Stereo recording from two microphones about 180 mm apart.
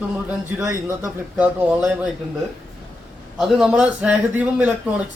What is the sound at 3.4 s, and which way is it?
Speech, 5° right (ahead or behind).